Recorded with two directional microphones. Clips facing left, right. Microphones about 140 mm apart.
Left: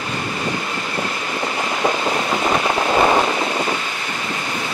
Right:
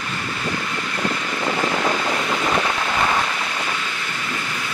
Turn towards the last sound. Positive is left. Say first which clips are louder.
# left 6 dB
turn(degrees=35)  # may be behind; listen again after turning